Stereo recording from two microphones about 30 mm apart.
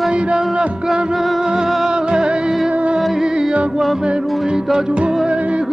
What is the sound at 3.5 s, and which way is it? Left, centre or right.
Music, right.